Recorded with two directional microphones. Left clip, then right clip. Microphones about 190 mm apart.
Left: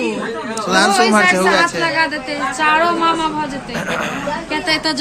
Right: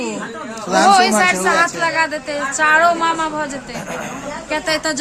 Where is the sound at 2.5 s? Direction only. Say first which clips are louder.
Right 2 dB; 55° right (ahead or behind).